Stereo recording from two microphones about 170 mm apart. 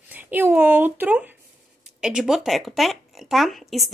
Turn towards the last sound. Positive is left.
turn(degrees=0)  # may be behind; listen again after turning